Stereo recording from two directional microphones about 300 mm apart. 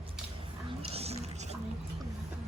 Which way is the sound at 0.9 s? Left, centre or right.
Right.